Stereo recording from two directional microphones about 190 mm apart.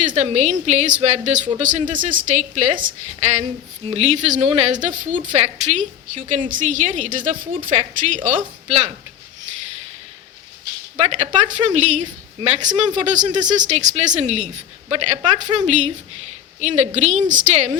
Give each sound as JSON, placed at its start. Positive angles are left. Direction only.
{"t": 0.0, "sound": "a woman's voice", "side_deg": -40}
{"t": 10.9, "sound": "a woman's voice", "side_deg": -35}